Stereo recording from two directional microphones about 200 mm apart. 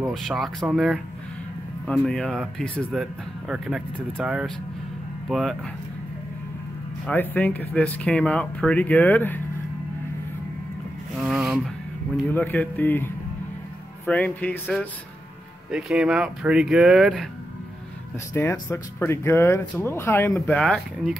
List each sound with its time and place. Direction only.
0.1 s speech: centre (ahead or behind)
7.1 s speech: 10° left (ahead or behind)
11.2 s a sound: centre (ahead or behind)
12.3 s speech: 10° left (ahead or behind)
15.7 s speech: 5° right (ahead or behind)
18.3 s speech: 15° left (ahead or behind)